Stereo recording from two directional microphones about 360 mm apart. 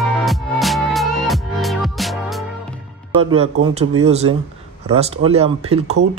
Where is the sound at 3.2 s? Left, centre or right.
Centre.